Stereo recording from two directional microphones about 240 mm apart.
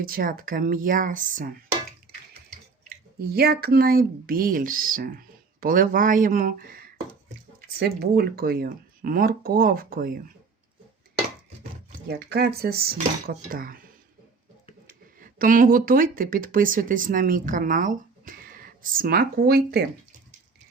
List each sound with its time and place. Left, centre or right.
0.0 s speech: right
3.2 s speech: right
11.9 s speech: right
15.2 s speech: right